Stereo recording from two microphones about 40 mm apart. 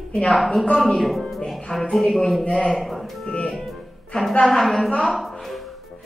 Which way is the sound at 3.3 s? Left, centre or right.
Left.